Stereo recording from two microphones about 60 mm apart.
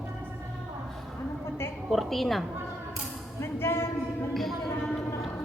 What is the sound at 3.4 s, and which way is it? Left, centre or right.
Speech, left.